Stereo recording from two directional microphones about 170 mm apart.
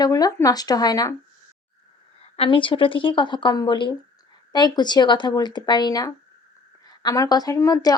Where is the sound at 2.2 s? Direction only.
35° left (ahead or behind).